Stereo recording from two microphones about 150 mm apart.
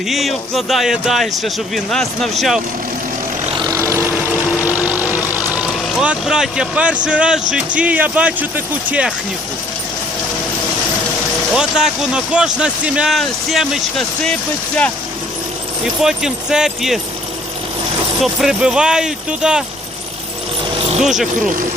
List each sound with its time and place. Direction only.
0.1 s speech: centre (ahead or behind)
3.6 s vehicle: 20° right (ahead or behind); by 7.4 s 5° right (ahead or behind)
7.5 s speech: 10° right (ahead or behind)
11.5 s speech: 5° right (ahead or behind)
16.0 s speech: 5° right (ahead or behind)
18.2 s speech: centre (ahead or behind)
21.0 s speech: 5° right (ahead or behind)